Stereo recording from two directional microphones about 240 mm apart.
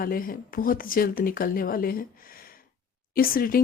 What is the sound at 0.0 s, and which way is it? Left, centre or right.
Speech, left.